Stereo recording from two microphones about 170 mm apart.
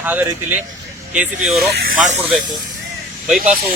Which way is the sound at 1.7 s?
70° right (ahead or behind).